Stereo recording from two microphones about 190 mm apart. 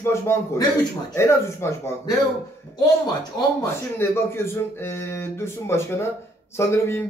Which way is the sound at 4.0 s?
10° left (ahead or behind).